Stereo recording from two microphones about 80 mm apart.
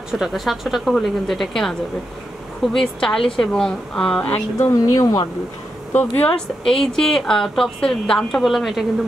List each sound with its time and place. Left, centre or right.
0.2 s a woman's voice: centre
4.6 s speech: left
6.1 s a woman's voice: centre
6.6 s a woman's voice: centre